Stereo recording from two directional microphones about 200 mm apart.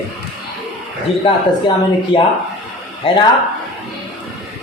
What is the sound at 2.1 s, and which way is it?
Speech, 25° left (ahead or behind).